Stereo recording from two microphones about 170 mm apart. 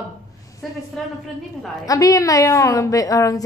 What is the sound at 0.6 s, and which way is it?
Speech, centre (ahead or behind).